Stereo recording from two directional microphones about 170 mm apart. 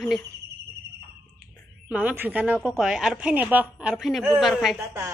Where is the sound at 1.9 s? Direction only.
10° right (ahead or behind).